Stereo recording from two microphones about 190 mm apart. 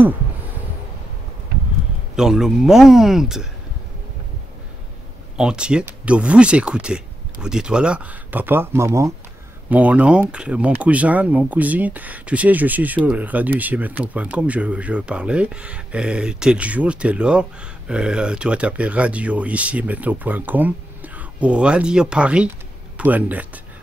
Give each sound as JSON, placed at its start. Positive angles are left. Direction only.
{"t": 2.1, "sound": "speech", "side_deg": -5}
{"t": 5.4, "sound": "speech", "side_deg": -5}